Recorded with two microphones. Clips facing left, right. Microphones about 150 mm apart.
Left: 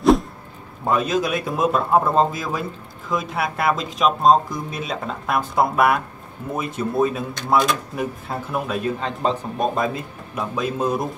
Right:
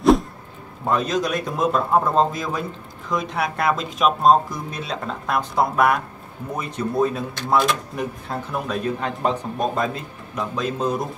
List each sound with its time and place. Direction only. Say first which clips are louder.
0.8 s speech: left 1 dB; 5° left (ahead or behind)